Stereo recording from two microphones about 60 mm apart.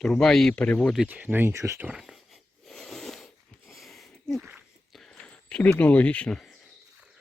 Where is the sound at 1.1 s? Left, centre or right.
Right.